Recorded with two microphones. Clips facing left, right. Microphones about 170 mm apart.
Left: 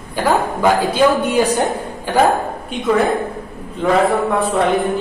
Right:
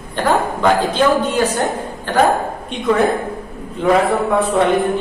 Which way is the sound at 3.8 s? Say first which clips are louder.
Even; centre (ahead or behind).